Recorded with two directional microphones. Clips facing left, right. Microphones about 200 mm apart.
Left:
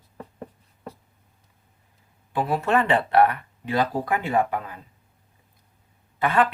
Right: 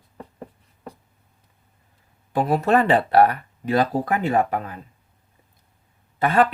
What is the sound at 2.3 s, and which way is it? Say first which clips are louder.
Speech: right 4 dB; 40° right (ahead or behind).